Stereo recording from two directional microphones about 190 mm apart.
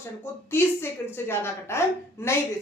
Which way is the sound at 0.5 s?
10° left (ahead or behind).